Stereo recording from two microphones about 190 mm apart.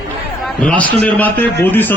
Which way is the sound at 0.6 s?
5° left (ahead or behind).